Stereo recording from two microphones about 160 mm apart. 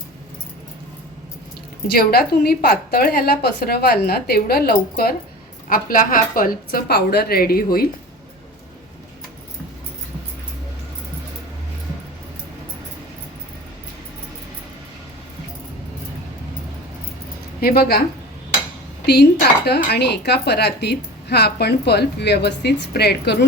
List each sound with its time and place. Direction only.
1.9 s a woman's voice: 70° left (ahead or behind)
5.6 s a woman's voice: 60° left (ahead or behind)
17.6 s a woman's voice: 75° left (ahead or behind)
19.0 s speech: 90° left